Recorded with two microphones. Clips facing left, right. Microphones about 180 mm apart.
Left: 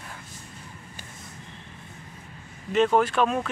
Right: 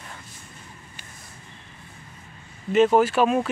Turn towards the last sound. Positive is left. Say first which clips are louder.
# right 4 dB
turn(degrees=-5)  # may be behind; listen again after turning